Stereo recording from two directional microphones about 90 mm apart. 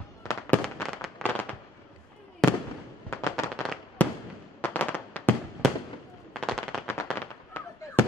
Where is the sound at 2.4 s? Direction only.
5° left (ahead or behind).